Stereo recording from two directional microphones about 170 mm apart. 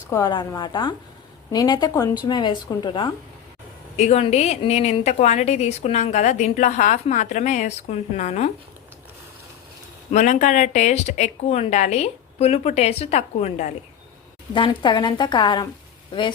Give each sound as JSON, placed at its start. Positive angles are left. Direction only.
{"t": 0.1, "sound": "a woman's voice", "side_deg": 20}
{"t": 3.9, "sound": "a woman's voice", "side_deg": 40}
{"t": 10.1, "sound": "a woman's voice", "side_deg": 45}
{"t": 14.5, "sound": "a woman's voice", "side_deg": 30}